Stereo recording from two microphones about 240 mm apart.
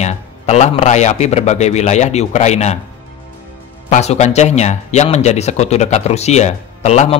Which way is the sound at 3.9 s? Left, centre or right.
Left.